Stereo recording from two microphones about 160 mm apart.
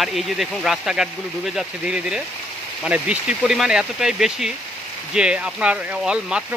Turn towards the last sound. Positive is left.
turn(degrees=-5)  # may be behind; listen again after turning